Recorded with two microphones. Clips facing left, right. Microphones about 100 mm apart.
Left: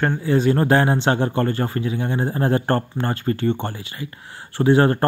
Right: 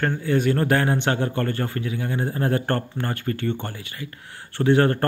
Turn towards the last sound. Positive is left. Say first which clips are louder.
# left 3 dB
turn(degrees=25)  # may be behind; listen again after turning